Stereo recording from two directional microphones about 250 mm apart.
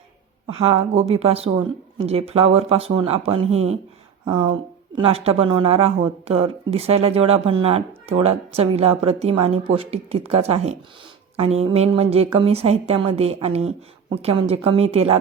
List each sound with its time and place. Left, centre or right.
0.4 s speech: right